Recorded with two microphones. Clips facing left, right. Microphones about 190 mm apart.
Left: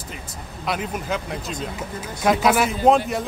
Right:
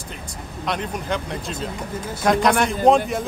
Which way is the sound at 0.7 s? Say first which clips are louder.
Even; 5° left (ahead or behind).